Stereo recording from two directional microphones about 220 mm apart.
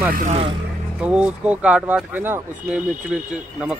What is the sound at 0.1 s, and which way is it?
Speech, 35° right (ahead or behind).